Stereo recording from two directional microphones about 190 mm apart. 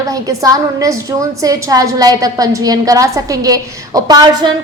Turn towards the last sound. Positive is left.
turn(degrees=-20)  # may be behind; listen again after turning